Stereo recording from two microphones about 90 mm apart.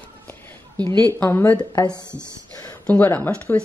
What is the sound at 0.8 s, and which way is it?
Speech, 50° right (ahead or behind).